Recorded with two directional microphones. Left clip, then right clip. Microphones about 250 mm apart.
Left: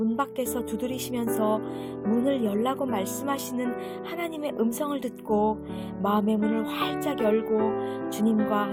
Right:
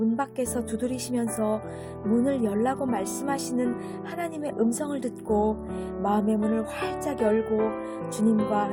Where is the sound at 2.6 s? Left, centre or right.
Left.